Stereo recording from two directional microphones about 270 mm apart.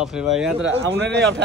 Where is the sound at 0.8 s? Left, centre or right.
Right.